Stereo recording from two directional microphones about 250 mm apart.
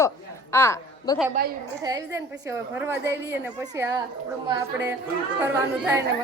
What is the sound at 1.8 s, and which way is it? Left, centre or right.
A woman's voice, centre.